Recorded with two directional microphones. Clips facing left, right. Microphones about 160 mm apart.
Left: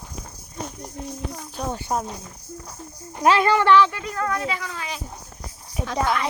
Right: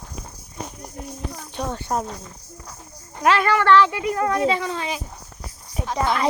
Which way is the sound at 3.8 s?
10° right (ahead or behind).